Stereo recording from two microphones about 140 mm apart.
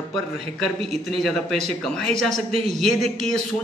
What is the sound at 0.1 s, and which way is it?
Speech, centre (ahead or behind).